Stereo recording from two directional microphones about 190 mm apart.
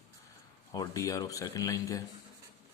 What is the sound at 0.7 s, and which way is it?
Speech, 20° left (ahead or behind).